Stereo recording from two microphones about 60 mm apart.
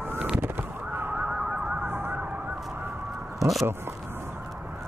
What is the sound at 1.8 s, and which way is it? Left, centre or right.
Emergency vehicle, right.